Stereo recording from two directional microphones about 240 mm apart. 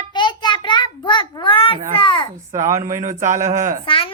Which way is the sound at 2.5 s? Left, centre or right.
Centre.